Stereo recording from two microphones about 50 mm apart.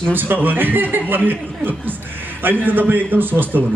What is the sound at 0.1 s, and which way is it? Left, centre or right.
Speech, right.